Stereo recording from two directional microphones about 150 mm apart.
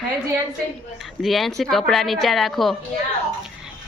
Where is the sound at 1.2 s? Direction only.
Centre (ahead or behind).